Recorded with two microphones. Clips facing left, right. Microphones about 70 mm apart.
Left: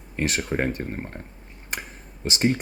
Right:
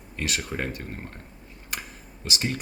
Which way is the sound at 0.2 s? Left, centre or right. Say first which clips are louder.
Left 5 dB; left.